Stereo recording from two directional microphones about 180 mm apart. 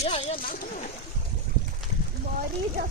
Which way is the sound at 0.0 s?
40° left (ahead or behind).